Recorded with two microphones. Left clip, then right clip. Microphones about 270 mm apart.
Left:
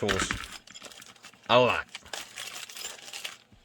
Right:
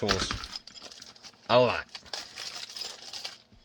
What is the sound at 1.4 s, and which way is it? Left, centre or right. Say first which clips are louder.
Crumpling: left 1 dB; centre.